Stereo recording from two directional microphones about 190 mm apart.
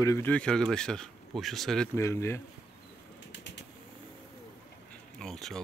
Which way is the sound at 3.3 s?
70° left (ahead or behind).